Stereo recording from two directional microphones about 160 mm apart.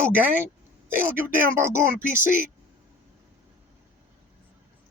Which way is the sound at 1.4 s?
15° right (ahead or behind).